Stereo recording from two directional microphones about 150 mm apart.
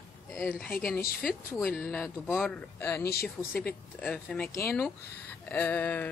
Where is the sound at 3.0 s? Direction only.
90° left.